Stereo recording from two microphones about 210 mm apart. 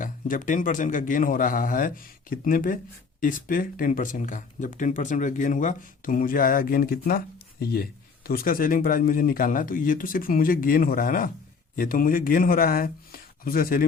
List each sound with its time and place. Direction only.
0.0 s speech: 40° left (ahead or behind)